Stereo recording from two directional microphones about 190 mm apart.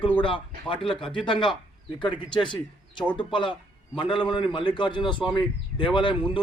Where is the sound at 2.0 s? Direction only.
25° left (ahead or behind).